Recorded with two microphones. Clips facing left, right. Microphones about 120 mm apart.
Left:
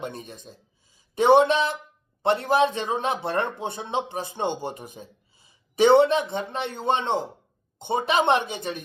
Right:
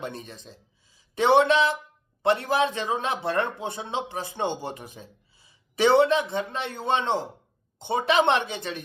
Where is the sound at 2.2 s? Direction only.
20° left (ahead or behind).